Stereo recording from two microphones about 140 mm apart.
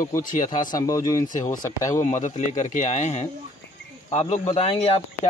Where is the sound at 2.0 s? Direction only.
60° left (ahead or behind).